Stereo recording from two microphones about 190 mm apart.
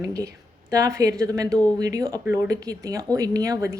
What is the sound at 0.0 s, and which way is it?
Speech, 20° right (ahead or behind).